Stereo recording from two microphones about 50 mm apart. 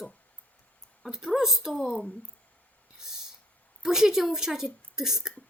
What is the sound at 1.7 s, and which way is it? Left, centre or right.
Speech, centre.